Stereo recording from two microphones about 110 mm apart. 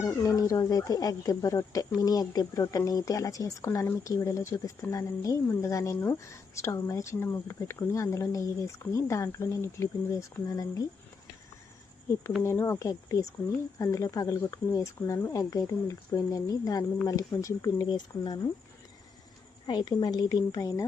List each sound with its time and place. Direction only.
0.0 s speech: 25° left (ahead or behind)
12.4 s a woman's voice: 25° left (ahead or behind); by 18.3 s 40° left (ahead or behind)
19.6 s a woman's voice: 40° left (ahead or behind)